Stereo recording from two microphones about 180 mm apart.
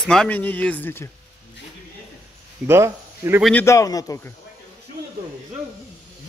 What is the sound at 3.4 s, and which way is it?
Speech, 10° left (ahead or behind).